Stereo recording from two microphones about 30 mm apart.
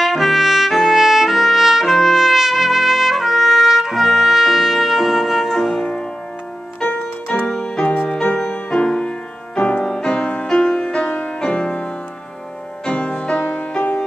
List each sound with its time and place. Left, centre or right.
0.0 s trumpet: centre
5.5 s music: centre
6.9 s keyboard: left
7.6 s music: left
11.1 s music: left
12.9 s music: left
13.4 s music: left